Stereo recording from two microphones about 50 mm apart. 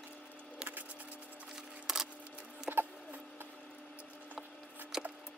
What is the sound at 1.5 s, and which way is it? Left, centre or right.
Music, centre.